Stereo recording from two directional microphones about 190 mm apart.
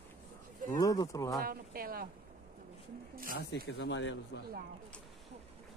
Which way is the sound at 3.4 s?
60° left (ahead or behind).